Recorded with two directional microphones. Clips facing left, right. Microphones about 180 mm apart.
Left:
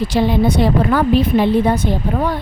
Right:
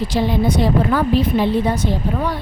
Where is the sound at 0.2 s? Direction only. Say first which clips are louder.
Left 3 dB; 65° left (ahead or behind).